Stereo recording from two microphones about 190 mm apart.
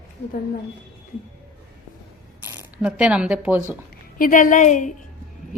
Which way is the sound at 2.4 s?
10° right (ahead or behind).